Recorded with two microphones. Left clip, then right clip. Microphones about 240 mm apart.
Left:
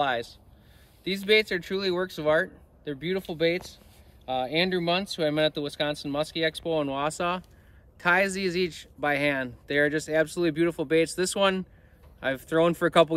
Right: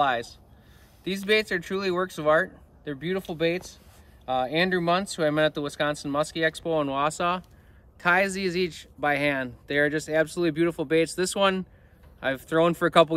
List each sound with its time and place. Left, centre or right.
0.0 s speech: centre